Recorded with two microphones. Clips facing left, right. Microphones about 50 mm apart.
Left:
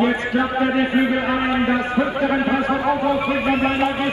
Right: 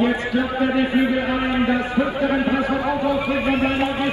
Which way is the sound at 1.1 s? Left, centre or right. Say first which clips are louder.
Left 1 dB; left.